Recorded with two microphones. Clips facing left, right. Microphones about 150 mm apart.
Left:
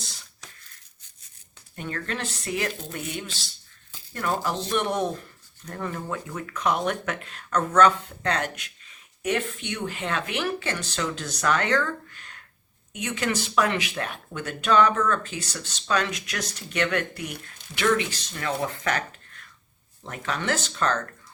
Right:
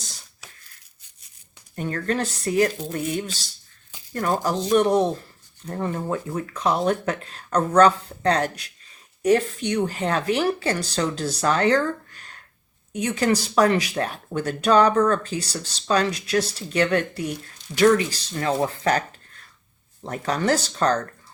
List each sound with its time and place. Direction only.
1.7 s speech: 40° right (ahead or behind)
20.1 s speech: 35° right (ahead or behind)